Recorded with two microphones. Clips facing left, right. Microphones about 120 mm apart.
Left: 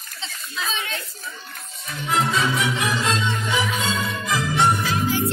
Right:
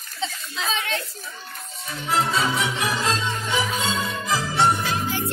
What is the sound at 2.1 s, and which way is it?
Music, 30° right (ahead or behind).